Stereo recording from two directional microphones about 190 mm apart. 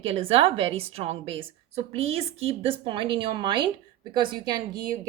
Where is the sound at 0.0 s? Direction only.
30° right (ahead or behind).